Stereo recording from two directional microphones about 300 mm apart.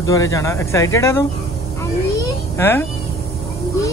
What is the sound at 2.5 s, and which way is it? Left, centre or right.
Speech, centre.